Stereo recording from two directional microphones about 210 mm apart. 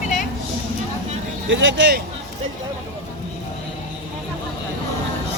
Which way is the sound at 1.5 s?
60° right (ahead or behind).